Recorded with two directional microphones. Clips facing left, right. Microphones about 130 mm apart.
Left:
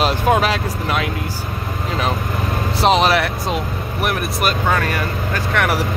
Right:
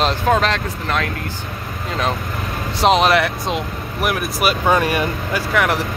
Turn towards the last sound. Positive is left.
turn(degrees=-5)  # may be behind; listen again after turning